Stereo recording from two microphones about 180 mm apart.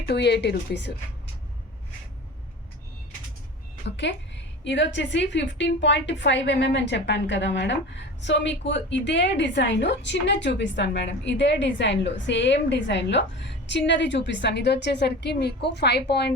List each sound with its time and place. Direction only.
0.0 s a woman's voice: 70° left (ahead or behind)
3.8 s a woman's voice: 80° left